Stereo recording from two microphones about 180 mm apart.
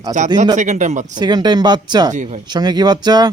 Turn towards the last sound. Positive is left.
turn(degrees=-25)  # may be behind; listen again after turning